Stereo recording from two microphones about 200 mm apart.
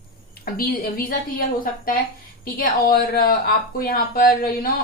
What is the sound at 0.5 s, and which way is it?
Speech, 45° left (ahead or behind).